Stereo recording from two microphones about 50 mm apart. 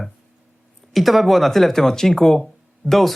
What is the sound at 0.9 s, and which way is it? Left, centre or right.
Speech, centre.